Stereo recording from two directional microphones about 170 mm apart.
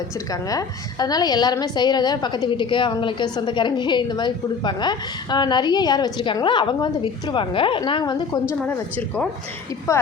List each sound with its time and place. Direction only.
0.3 s a woman's voice: 20° left (ahead or behind)
8.6 s a woman's voice: 10° left (ahead or behind)